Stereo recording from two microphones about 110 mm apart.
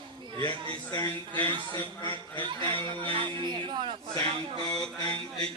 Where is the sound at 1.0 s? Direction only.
20° left (ahead or behind).